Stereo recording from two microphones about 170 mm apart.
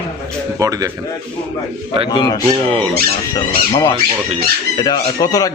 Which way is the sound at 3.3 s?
20° left (ahead or behind).